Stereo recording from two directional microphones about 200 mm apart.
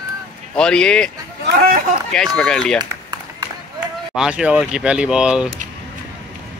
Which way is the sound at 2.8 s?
20° right (ahead or behind).